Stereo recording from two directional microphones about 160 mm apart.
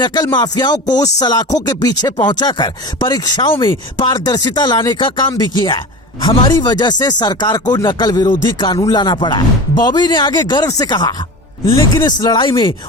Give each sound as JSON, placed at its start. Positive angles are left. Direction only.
{"t": 0.0, "sound": "speech", "side_deg": 25}